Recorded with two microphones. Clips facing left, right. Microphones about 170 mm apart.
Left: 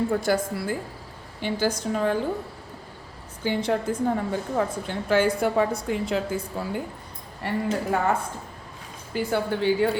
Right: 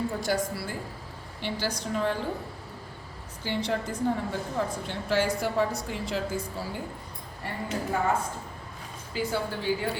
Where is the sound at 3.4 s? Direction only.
50° left (ahead or behind).